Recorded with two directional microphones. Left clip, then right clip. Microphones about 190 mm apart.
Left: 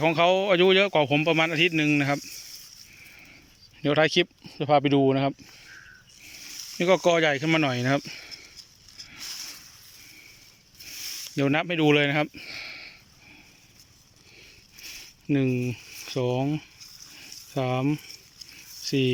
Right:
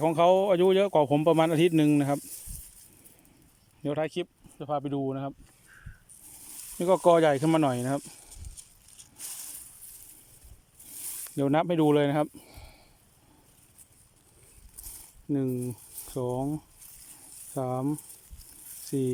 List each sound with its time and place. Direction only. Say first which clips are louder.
0.0 s speech: left 1 dB; 20° right (ahead or behind)
3.8 s speech: left 9 dB; centre (ahead or behind)
6.7 s speech: even; 15° right (ahead or behind)
11.3 s speech: even; 15° right (ahead or behind)
15.3 s speech: left 5 dB; 5° right (ahead or behind)
17.6 s speech: left 4 dB; 5° right (ahead or behind)
18.9 s speech: left 5 dB; 15° right (ahead or behind)